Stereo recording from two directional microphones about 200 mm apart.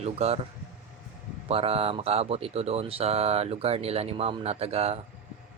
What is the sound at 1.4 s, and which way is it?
Speech, 30° right (ahead or behind).